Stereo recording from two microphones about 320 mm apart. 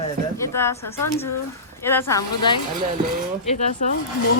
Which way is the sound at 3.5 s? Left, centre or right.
Left.